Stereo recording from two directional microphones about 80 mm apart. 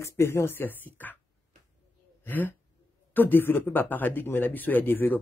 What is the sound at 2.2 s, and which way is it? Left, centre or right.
A man's voice, left.